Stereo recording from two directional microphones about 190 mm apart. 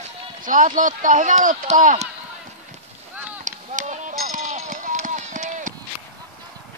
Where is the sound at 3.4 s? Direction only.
40° right (ahead or behind).